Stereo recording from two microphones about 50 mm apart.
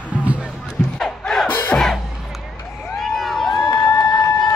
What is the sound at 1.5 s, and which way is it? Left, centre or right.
Music, left.